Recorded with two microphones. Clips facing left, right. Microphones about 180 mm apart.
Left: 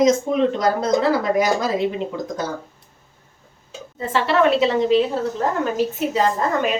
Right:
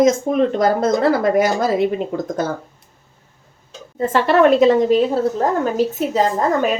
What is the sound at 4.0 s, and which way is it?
A woman's voice, 45° right (ahead or behind).